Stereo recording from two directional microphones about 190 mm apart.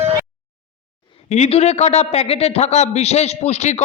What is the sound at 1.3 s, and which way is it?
A man's voice, 35° left (ahead or behind).